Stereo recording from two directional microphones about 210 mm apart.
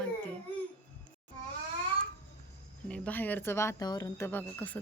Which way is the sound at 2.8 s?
5° left (ahead or behind).